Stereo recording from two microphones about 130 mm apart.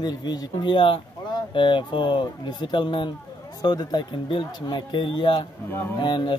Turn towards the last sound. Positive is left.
turn(degrees=40)  # may be behind; listen again after turning